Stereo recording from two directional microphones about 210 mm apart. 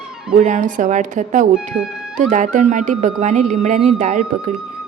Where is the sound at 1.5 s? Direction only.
5° right (ahead or behind).